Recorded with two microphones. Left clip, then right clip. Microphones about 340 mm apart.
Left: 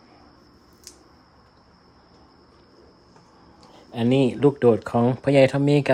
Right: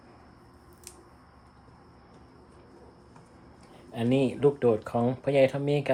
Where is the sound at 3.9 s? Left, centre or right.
Left.